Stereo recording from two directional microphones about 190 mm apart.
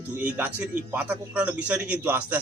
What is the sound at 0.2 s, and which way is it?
A man's voice, 10° right (ahead or behind).